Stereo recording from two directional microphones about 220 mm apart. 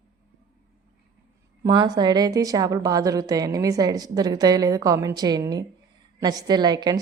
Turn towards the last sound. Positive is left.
turn(degrees=-20)  # may be behind; listen again after turning